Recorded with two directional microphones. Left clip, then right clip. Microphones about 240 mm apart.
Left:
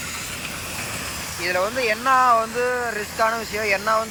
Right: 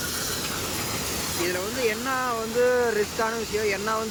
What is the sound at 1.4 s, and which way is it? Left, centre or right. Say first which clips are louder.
Speech: left 6 dB; centre.